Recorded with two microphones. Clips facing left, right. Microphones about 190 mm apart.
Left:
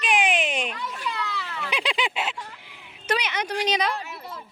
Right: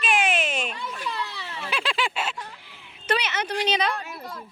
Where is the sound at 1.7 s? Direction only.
20° left (ahead or behind).